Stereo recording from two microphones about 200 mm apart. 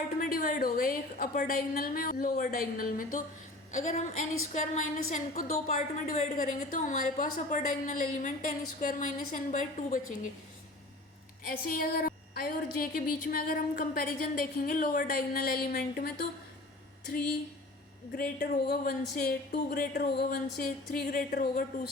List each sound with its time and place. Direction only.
0.2 s a woman's voice: 45° left (ahead or behind)
11.4 s a woman's voice: 45° left (ahead or behind)
18.2 s a woman's voice: 55° left (ahead or behind)